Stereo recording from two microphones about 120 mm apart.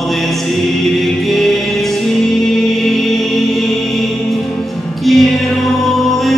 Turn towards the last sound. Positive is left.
turn(degrees=0)  # may be behind; listen again after turning